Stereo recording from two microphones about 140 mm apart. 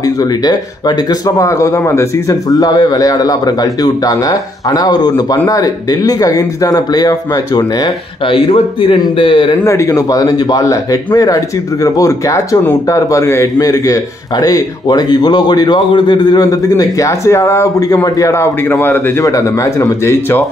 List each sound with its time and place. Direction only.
0.2 s a man's voice: 30° left (ahead or behind)
9.7 s speech: 20° left (ahead or behind)